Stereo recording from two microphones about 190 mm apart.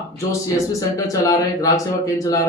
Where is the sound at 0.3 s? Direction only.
15° left (ahead or behind).